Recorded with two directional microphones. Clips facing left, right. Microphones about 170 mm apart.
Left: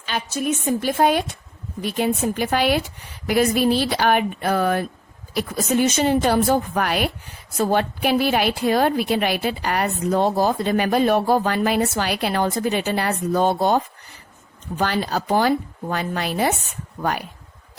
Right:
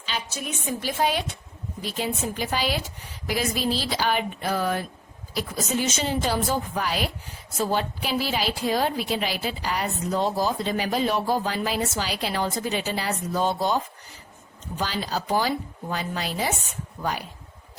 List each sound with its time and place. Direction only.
0.0 s a woman's voice: 50° left (ahead or behind)